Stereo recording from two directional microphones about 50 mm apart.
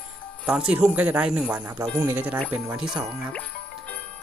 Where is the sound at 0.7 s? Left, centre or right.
Right.